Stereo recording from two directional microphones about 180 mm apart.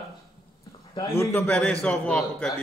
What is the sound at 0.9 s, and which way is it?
Speech, 15° left (ahead or behind).